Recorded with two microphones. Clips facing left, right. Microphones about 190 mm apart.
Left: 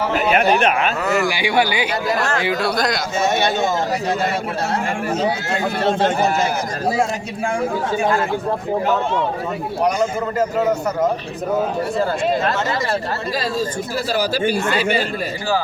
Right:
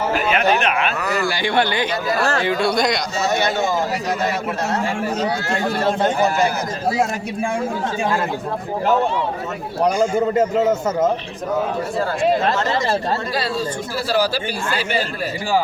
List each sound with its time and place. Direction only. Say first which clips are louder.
1.0 s a man's voice: left 2 dB; 15° left (ahead or behind)
3.2 s speech: left 1 dB; 25° left (ahead or behind)
9.8 s a man's voice: right 3 dB; 25° right (ahead or behind)